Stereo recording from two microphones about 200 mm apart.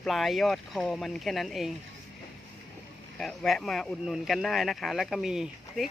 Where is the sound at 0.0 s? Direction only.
Centre (ahead or behind).